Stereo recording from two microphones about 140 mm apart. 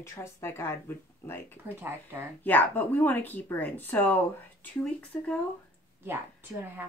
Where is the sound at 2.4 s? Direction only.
15° left (ahead or behind).